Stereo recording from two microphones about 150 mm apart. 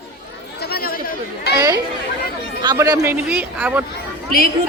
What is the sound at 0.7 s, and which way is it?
Chatter, 90° left.